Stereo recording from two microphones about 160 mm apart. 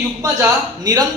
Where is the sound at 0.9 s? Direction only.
25° right (ahead or behind).